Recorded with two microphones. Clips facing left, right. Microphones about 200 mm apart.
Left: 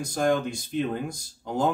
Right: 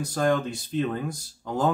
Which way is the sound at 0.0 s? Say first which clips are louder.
Even; 10° left (ahead or behind).